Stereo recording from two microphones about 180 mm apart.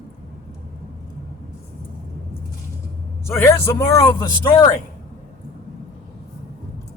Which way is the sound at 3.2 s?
15° left (ahead or behind).